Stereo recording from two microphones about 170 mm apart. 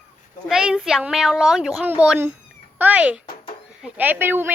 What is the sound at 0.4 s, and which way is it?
Speech, 5° right (ahead or behind).